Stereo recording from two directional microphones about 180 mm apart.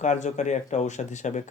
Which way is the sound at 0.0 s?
40° left (ahead or behind).